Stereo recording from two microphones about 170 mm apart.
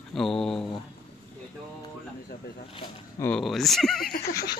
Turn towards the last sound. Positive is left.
turn(degrees=65)  # may be behind; listen again after turning